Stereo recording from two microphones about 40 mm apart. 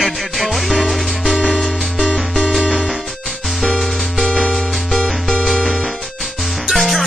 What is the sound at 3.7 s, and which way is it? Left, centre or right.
Music, left.